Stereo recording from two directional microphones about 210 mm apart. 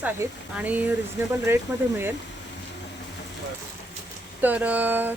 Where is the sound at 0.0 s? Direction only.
10° right (ahead or behind).